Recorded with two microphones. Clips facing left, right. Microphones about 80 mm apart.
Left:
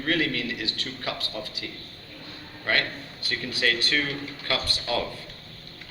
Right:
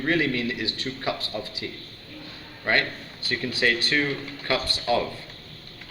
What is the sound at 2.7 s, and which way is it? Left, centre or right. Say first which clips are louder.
A man's voice: right 2 dB; right.